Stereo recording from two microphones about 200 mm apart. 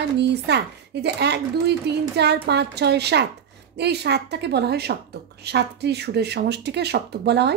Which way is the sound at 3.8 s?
55° right (ahead or behind).